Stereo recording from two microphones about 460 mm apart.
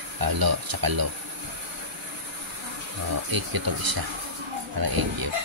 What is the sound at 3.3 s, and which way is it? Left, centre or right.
Speech, right.